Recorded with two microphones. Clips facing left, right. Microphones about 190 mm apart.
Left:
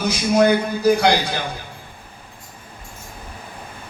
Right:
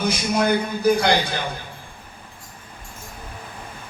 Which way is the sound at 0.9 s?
60° left (ahead or behind).